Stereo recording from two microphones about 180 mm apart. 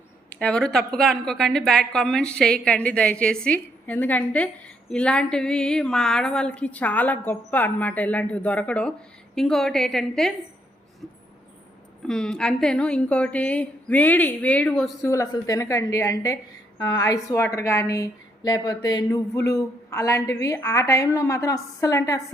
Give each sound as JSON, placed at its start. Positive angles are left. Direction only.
{"t": 0.3, "sound": "a woman's voice", "side_deg": 5}
{"t": 12.0, "sound": "a woman's voice", "side_deg": 5}
{"t": 15.0, "sound": "a woman's voice", "side_deg": 15}